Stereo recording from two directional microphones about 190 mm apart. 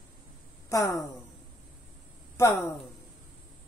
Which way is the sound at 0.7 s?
15° left (ahead or behind).